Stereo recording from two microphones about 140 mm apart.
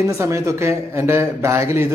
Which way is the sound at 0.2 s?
20° right (ahead or behind).